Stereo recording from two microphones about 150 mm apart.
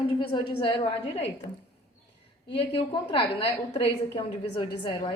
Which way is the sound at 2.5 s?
35° left (ahead or behind).